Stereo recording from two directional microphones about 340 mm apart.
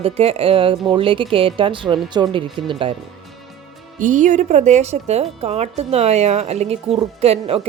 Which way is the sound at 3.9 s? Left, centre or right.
Right.